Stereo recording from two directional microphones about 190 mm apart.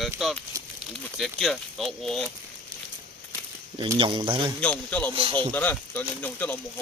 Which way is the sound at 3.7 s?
25° right (ahead or behind).